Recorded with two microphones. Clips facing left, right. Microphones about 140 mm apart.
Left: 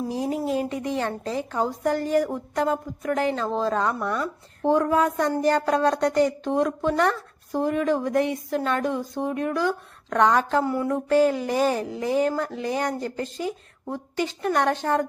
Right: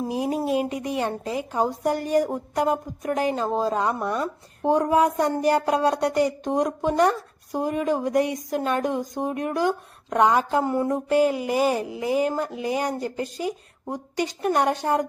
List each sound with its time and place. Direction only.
0.1 s a woman's voice: 20° right (ahead or behind)